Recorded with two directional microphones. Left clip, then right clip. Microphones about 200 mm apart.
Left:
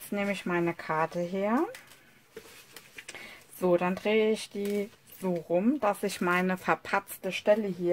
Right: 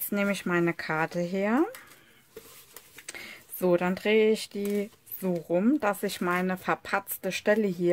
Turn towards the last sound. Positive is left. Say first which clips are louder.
# even
turn(degrees=-30)  # may be behind; listen again after turning